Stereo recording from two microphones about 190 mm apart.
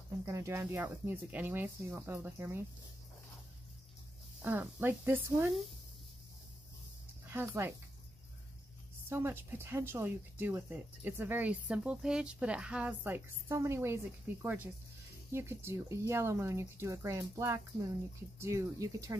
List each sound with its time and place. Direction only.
0.2 s speech: 15° right (ahead or behind)
4.4 s speech: 10° right (ahead or behind)
7.2 s speech: 10° right (ahead or behind)
9.1 s speech: 10° right (ahead or behind)